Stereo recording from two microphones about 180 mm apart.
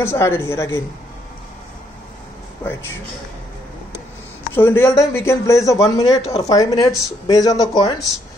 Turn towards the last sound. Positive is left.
turn(degrees=20)  # may be behind; listen again after turning